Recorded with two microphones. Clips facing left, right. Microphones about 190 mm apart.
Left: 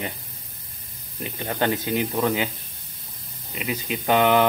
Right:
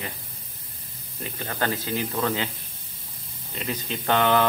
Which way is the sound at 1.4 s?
25° left (ahead or behind).